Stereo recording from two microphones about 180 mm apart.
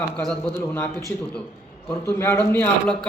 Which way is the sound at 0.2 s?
5° left (ahead or behind).